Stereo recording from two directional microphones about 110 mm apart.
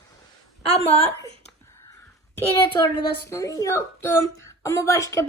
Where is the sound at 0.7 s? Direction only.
70° left (ahead or behind).